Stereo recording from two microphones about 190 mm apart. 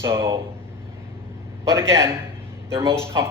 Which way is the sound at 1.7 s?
15° right (ahead or behind).